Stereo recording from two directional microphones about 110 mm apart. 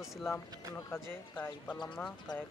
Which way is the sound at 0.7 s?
20° left (ahead or behind).